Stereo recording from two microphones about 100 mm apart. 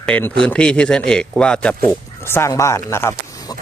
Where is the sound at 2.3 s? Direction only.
25° left (ahead or behind).